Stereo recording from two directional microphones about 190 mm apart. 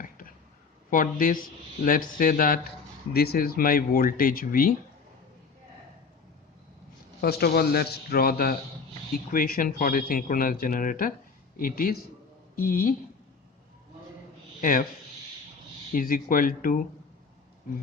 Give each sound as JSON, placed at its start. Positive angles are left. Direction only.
{"t": 0.9, "sound": "speech", "side_deg": 45}
{"t": 7.2, "sound": "a man's voice", "side_deg": 55}
{"t": 14.6, "sound": "speech", "side_deg": 45}
{"t": 16.0, "sound": "speech", "side_deg": 45}